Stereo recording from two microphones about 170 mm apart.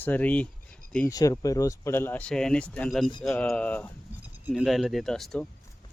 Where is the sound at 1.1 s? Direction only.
20° left (ahead or behind); by 5.4 s centre (ahead or behind).